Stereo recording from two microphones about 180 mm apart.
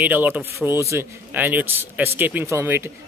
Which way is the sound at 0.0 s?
10° right (ahead or behind).